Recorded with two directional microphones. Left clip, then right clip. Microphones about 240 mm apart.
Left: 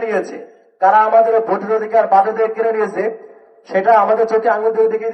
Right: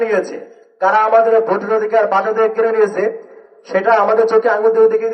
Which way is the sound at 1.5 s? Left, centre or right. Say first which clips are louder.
Right 1 dB; right.